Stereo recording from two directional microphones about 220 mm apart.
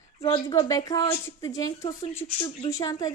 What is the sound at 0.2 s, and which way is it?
A woman's voice, 20° left (ahead or behind).